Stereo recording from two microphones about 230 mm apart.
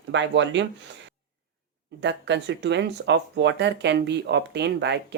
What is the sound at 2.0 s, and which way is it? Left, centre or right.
Speech, right.